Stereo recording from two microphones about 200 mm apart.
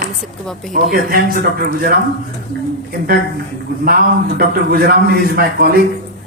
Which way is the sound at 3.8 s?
50° right (ahead or behind).